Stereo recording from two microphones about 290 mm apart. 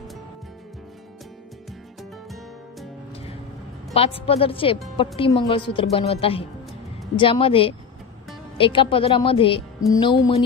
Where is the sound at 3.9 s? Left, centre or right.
Centre.